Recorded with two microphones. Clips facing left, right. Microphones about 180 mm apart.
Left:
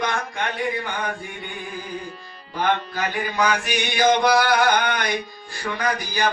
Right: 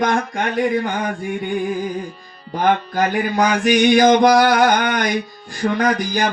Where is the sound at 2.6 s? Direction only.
45° right (ahead or behind).